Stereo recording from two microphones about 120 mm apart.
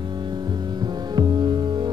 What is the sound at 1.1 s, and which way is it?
Music, 35° right (ahead or behind).